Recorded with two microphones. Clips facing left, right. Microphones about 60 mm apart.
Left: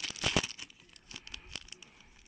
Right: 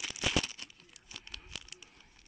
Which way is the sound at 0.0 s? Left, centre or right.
Centre.